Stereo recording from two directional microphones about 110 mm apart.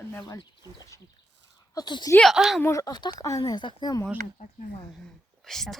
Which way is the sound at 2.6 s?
30° left (ahead or behind).